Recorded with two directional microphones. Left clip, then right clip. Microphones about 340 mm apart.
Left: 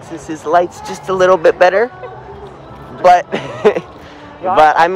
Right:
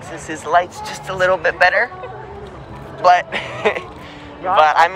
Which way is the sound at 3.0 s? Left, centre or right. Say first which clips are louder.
Left 4 dB; centre.